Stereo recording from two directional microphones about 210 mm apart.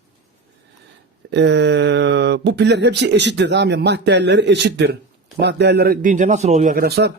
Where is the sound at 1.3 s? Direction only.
55° right (ahead or behind).